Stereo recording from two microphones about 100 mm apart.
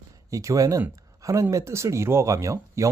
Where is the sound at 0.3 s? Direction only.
35° right (ahead or behind).